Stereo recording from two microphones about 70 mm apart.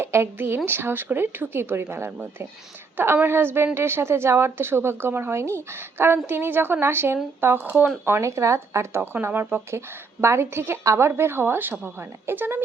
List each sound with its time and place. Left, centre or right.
0.0 s a woman's voice: right
3.2 s a woman's voice: right
7.6 s speech: right
8.2 s a woman's voice: right